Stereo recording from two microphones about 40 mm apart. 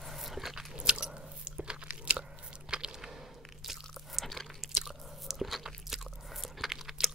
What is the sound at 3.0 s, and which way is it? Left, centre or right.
Crunch, centre.